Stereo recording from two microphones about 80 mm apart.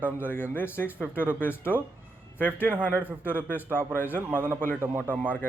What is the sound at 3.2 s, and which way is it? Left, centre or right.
Speech, left.